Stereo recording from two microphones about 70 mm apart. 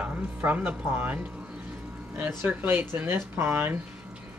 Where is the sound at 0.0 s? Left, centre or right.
Right.